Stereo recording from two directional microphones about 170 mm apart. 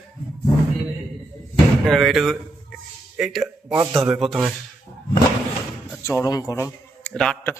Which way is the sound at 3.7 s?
20° right (ahead or behind).